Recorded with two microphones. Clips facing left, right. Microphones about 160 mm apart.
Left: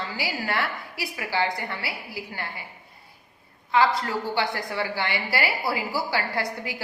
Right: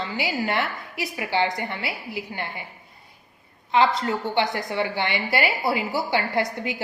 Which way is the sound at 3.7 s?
20° right (ahead or behind).